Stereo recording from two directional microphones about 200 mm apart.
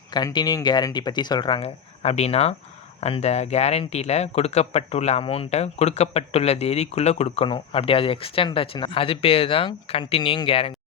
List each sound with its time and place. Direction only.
0.1 s speech: 20° left (ahead or behind)